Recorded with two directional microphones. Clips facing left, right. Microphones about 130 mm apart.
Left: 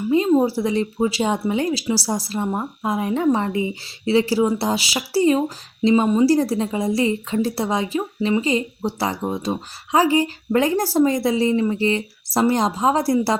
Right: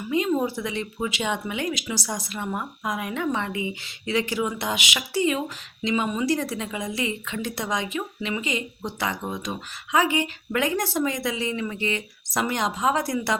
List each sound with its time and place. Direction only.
0.1 s a woman's voice: 30° left (ahead or behind)